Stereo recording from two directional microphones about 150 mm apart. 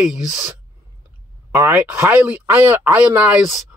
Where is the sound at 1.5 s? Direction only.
15° right (ahead or behind).